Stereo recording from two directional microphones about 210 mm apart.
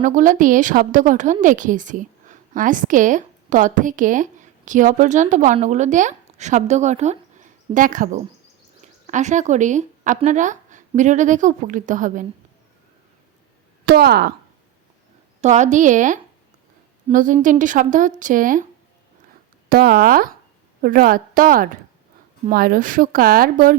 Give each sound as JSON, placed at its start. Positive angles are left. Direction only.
{"t": 0.0, "sound": "a woman's voice", "side_deg": -35}
{"t": 13.8, "sound": "speech", "side_deg": -50}
{"t": 15.4, "sound": "a woman's voice", "side_deg": -35}
{"t": 19.7, "sound": "speech", "side_deg": -45}